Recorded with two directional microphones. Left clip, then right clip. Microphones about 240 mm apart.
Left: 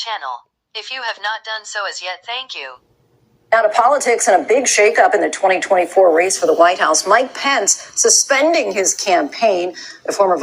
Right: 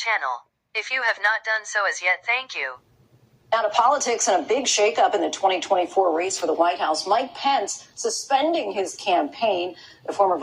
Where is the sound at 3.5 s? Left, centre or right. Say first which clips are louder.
Left 7 dB; left.